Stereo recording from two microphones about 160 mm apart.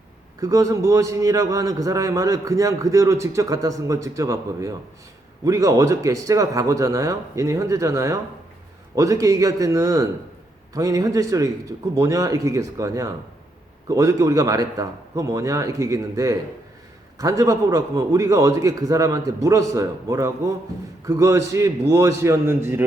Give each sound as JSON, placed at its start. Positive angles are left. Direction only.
{"t": 0.3, "sound": "a man's voice", "side_deg": -20}